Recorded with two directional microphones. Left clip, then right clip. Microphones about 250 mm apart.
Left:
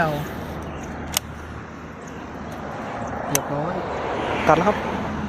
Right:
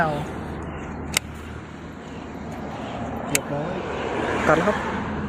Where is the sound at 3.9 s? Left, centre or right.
Right.